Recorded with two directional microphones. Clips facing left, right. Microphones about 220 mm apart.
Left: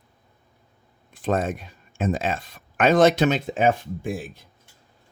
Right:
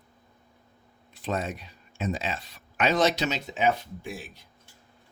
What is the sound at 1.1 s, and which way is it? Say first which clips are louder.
Speech: left 7 dB; 50° left (ahead or behind).